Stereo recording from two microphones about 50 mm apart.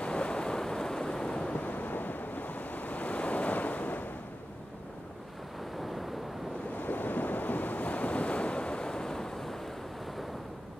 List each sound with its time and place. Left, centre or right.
0.0 s waves: left
1.6 s waves: left
5.8 s waves: centre
6.8 s waves: left; by 9.6 s centre